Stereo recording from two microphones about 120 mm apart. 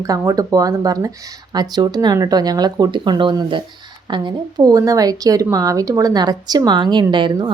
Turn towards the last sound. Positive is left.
turn(degrees=-40)  # may be behind; listen again after turning